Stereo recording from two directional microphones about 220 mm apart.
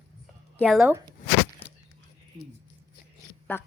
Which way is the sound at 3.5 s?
10° left (ahead or behind).